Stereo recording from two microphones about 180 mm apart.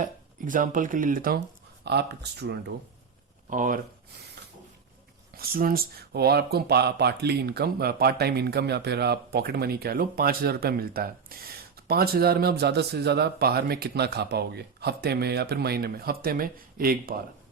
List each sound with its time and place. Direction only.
0.0 s speech: 45° right (ahead or behind)
1.8 s speech: 65° right (ahead or behind)
3.5 s speech: 45° right (ahead or behind)
5.4 s speech: 55° right (ahead or behind)